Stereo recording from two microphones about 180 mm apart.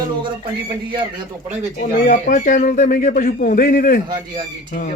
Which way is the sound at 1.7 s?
50° left (ahead or behind).